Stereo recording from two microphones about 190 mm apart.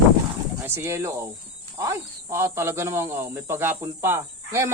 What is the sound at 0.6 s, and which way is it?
Speech, 15° right (ahead or behind).